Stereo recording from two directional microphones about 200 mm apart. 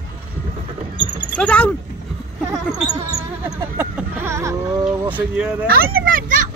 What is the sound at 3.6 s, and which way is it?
Speech, 10° right (ahead or behind).